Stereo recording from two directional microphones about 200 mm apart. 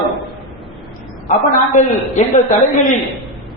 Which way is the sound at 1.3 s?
35° left (ahead or behind).